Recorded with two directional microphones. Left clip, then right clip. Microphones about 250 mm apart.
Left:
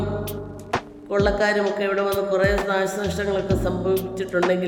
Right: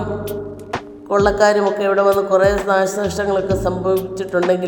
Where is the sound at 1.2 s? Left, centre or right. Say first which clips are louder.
Right 7 dB; centre.